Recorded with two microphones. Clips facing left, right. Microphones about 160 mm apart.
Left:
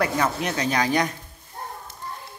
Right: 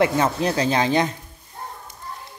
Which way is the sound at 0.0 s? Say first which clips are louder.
Right 4 dB; 30° right (ahead or behind).